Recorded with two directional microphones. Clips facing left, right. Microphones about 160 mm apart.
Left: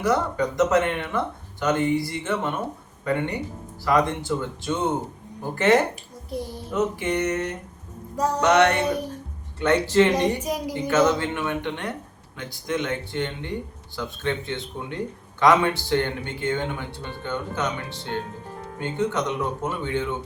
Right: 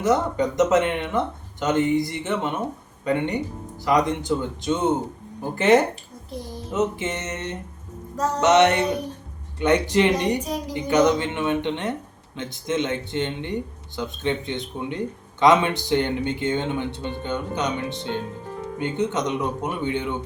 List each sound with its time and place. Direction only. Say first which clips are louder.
0.0 s speech: right 2 dB; 20° right (ahead or behind)
10.4 s a woman's voice: left 1 dB; 10° left (ahead or behind)
10.8 s speech: right 2 dB; 15° right (ahead or behind)